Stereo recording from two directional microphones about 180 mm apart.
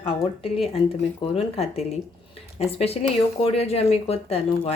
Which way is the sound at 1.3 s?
35° left (ahead or behind).